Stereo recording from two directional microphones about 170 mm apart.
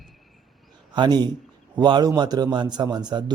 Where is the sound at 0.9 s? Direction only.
25° right (ahead or behind).